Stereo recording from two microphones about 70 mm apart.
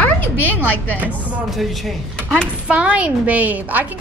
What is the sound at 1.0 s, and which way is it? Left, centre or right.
Speech, right.